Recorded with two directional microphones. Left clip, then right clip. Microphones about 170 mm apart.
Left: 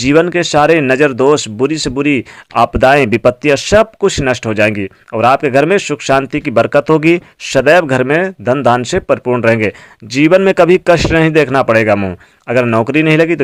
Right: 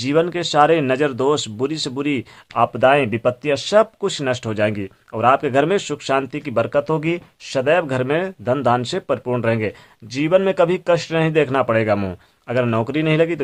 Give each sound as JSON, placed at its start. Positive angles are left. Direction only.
{"t": 0.0, "sound": "speech", "side_deg": 35}